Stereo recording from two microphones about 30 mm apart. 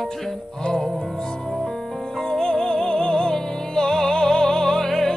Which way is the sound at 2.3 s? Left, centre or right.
Left.